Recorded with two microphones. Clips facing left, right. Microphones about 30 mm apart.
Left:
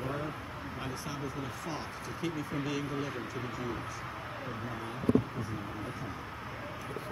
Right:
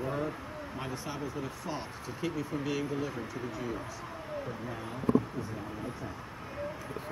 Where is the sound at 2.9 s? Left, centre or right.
Centre.